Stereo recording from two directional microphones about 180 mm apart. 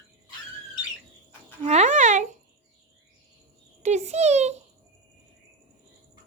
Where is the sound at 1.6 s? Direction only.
40° right (ahead or behind).